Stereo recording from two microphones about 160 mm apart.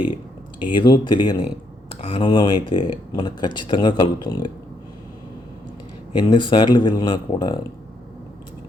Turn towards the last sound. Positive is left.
turn(degrees=25)  # may be behind; listen again after turning